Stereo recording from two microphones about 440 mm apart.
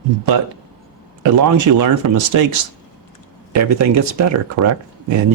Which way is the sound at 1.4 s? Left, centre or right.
Right.